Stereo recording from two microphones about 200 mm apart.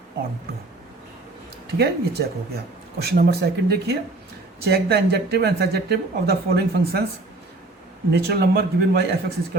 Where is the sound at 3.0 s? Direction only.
50° right (ahead or behind).